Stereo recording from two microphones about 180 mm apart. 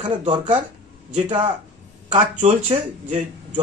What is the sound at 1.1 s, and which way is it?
Speech, 30° right (ahead or behind).